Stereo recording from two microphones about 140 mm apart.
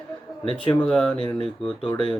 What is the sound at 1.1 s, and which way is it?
Speech, 40° left (ahead or behind).